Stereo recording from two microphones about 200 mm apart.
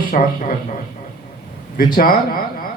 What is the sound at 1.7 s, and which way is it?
Speech, 45° left (ahead or behind).